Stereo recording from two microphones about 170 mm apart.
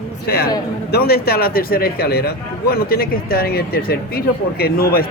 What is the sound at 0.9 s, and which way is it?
A man's voice, 65° left (ahead or behind).